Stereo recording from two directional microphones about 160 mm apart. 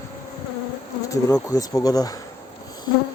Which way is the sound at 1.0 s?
20° left (ahead or behind).